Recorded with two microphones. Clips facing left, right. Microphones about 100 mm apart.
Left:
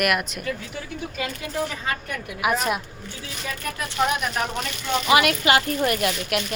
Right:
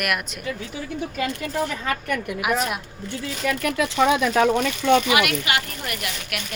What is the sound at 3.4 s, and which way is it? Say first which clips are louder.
Speech: right 8 dB; 85° right.